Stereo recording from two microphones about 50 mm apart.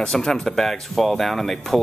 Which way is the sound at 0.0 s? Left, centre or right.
Centre.